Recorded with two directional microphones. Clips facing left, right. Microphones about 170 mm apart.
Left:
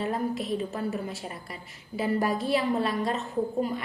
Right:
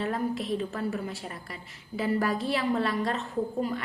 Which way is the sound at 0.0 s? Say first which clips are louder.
Left 1 dB; 20° left (ahead or behind).